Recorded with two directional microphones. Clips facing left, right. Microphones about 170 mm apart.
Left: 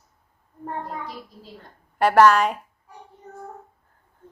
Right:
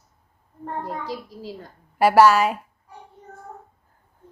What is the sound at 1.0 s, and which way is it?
Speech, 90° right.